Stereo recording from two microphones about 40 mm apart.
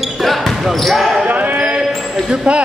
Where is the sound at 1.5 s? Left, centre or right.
Right.